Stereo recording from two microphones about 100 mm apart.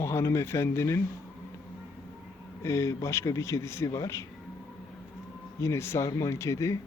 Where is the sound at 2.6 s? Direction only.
30° left (ahead or behind).